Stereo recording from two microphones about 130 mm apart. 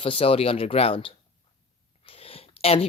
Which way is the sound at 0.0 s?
45° left (ahead or behind).